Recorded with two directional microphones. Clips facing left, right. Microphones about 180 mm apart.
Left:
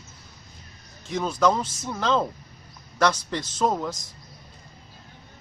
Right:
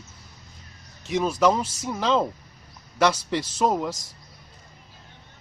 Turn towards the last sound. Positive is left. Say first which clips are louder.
# right 1 dB
turn(degrees=-10)  # may be behind; listen again after turning